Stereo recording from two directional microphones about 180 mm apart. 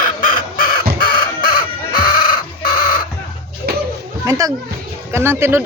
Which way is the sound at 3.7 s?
60° right (ahead or behind).